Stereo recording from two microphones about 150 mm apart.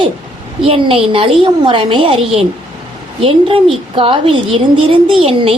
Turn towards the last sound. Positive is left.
turn(degrees=-40)  # may be behind; listen again after turning